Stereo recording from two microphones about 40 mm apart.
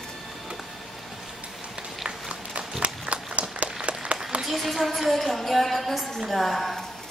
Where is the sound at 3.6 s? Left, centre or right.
Right.